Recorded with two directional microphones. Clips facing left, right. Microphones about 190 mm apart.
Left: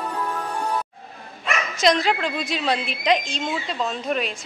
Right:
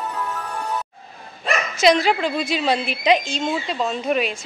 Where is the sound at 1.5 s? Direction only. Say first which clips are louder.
Right 3 dB; 35° right (ahead or behind).